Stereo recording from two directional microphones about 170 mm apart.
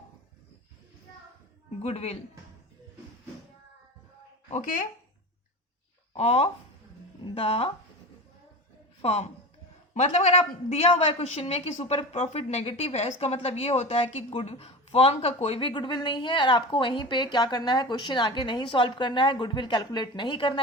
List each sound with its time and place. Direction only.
1.8 s a woman's voice: 40° left (ahead or behind)
4.4 s speech: 50° left (ahead or behind)
6.1 s a woman's voice: 35° left (ahead or behind)
9.0 s a woman's voice: 35° left (ahead or behind)